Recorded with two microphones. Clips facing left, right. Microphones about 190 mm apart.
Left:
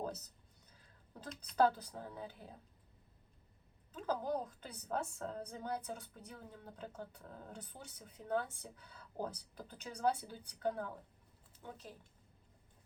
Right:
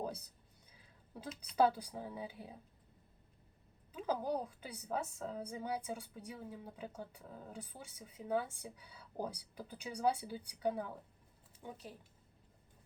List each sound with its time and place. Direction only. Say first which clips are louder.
1.1 s a woman's voice: right 1 dB; 5° right (ahead or behind)
3.9 s a woman's voice: right 1 dB; 10° right (ahead or behind)